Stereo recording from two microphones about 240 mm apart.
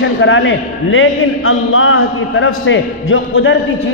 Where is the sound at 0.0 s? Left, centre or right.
Left.